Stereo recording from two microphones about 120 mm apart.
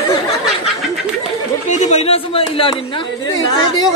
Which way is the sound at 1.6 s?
75° left (ahead or behind).